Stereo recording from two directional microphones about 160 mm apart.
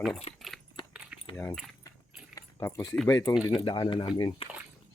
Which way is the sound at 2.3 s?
20° left (ahead or behind).